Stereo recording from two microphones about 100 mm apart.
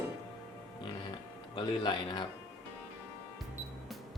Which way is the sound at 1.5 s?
50° left (ahead or behind).